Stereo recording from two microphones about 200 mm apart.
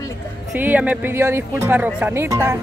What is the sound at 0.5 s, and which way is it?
Speech, 10° right (ahead or behind).